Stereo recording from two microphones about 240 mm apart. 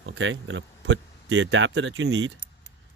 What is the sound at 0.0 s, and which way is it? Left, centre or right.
Speech, right.